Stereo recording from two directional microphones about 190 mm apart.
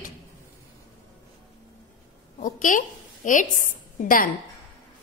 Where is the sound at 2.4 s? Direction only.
45° left (ahead or behind).